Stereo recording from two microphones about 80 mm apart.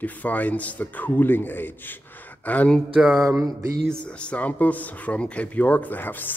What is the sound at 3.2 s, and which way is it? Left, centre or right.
Mantra, right.